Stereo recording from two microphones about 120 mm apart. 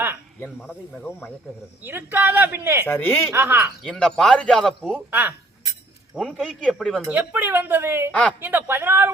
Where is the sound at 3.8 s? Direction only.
5° left (ahead or behind).